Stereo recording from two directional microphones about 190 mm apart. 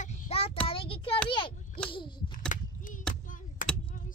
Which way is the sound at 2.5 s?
45° left (ahead or behind).